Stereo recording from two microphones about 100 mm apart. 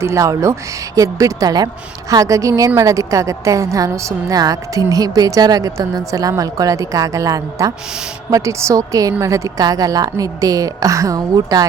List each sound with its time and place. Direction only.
0.0 s a woman's voice: 30° right (ahead or behind)